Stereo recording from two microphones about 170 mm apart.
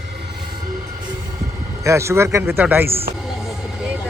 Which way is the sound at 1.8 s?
15° right (ahead or behind).